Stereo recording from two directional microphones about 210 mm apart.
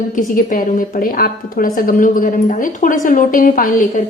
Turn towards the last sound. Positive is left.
turn(degrees=40)  # may be behind; listen again after turning